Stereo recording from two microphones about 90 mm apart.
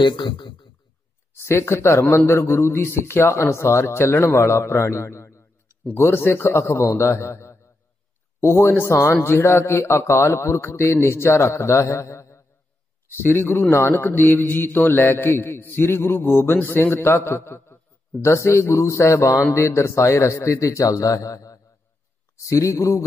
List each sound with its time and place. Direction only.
0.0 s a man's voice: 60° left (ahead or behind)
1.3 s a man's voice: 30° left (ahead or behind)